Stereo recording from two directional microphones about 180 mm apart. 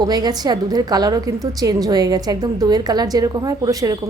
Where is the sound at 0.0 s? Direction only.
20° right (ahead or behind).